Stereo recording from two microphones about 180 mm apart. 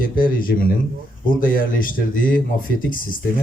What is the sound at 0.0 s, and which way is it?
Speech, 50° left (ahead or behind).